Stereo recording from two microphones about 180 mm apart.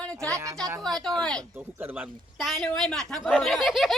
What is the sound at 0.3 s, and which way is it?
Speech, 15° right (ahead or behind).